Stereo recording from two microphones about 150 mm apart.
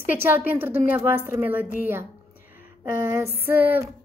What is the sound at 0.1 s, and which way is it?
A woman's voice, 15° right (ahead or behind).